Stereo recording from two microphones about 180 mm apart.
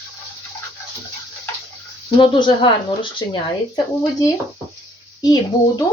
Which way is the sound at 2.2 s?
25° left (ahead or behind).